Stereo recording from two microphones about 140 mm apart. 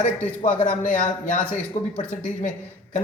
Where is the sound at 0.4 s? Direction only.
65° left (ahead or behind).